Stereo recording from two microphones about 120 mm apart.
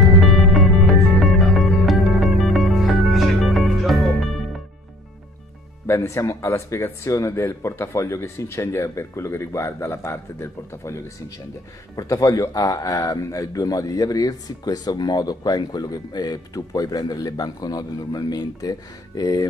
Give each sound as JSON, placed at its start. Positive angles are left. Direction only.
{"t": 0.2, "sound": "music", "side_deg": 0}
{"t": 5.9, "sound": "speech", "side_deg": 25}